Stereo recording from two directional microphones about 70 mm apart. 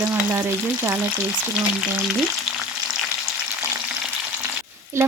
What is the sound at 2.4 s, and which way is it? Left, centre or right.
Frying, centre.